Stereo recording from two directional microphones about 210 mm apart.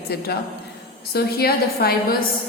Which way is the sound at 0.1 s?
50° left (ahead or behind).